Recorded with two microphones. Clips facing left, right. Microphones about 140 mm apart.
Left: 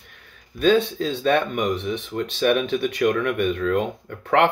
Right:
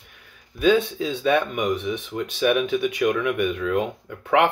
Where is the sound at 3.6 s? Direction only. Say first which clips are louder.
Left 1 dB; 10° right (ahead or behind).